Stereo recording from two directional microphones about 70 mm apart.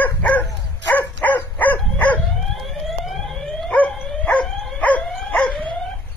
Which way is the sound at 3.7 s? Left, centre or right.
Left.